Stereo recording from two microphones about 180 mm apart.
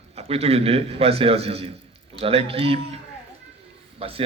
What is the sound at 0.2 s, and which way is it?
A man's voice, 35° right (ahead or behind).